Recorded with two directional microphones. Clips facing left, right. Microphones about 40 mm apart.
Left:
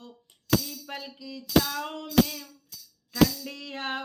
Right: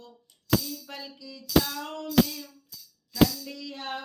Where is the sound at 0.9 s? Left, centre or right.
Left.